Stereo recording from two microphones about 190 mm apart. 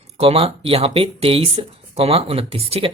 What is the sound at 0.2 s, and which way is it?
Speech, 30° right (ahead or behind).